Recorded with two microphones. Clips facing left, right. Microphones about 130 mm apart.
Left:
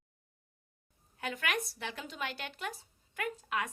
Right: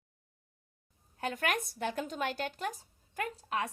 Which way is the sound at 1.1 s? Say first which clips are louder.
Right 3 dB; 45° right (ahead or behind).